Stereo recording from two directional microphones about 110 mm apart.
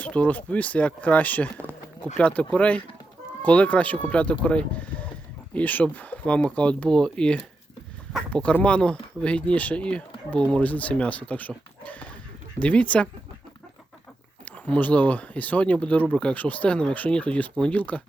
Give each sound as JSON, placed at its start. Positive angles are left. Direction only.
{"t": 0.0, "sound": "speech", "side_deg": 10}
{"t": 14.4, "sound": "speech", "side_deg": 15}